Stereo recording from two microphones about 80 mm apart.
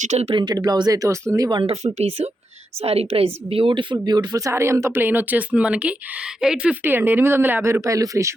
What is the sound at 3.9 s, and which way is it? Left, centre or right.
Speech, right.